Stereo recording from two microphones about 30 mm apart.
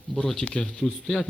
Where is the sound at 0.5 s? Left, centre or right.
Left.